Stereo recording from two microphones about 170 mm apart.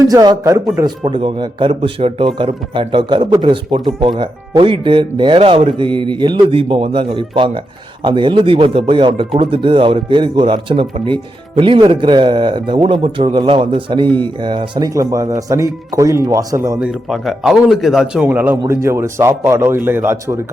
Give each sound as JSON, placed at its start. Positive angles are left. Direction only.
{"t": 0.0, "sound": "speech", "side_deg": -20}
{"t": 16.8, "sound": "speech", "side_deg": 0}